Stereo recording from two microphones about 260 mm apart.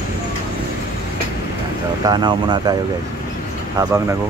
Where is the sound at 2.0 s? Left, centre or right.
Centre.